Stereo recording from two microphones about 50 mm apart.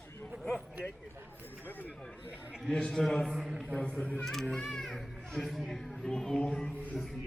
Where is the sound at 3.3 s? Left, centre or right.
Centre.